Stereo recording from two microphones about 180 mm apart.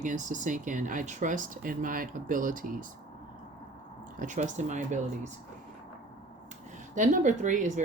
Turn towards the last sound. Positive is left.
turn(degrees=-45)  # may be behind; listen again after turning